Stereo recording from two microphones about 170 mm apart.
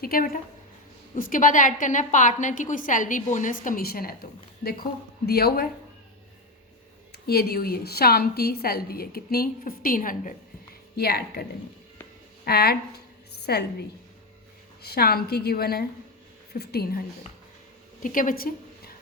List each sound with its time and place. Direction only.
0.0 s a woman's voice: 60° left (ahead or behind)
7.1 s a woman's voice: 70° left (ahead or behind); by 10.3 s 55° left (ahead or behind)
10.9 s a woman's voice: 65° left (ahead or behind)
12.5 s a woman's voice: 65° left (ahead or behind)
18.0 s a woman's voice: 55° left (ahead or behind)